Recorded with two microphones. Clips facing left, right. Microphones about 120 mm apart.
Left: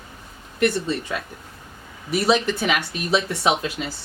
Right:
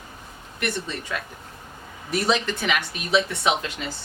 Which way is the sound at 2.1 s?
5° left (ahead or behind).